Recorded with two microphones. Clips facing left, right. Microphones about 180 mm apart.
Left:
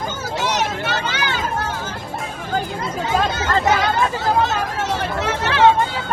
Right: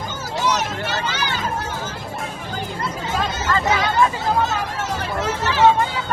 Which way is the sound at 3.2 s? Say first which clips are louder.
Left 2 dB; 65° left (ahead or behind).